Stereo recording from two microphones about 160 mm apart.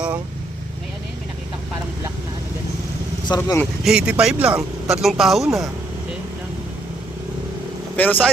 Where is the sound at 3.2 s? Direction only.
25° left (ahead or behind).